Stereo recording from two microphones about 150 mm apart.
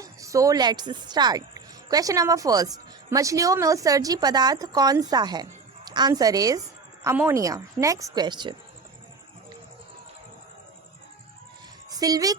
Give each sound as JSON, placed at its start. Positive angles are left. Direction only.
{"t": 0.0, "sound": "a woman's voice", "side_deg": -20}
{"t": 11.9, "sound": "speech", "side_deg": -25}